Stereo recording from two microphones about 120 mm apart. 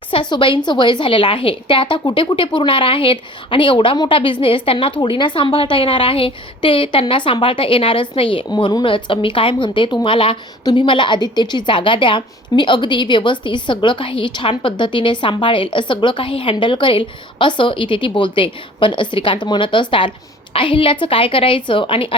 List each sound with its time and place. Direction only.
0.1 s a woman's voice: 45° left (ahead or behind)
8.4 s a woman's voice: 35° left (ahead or behind)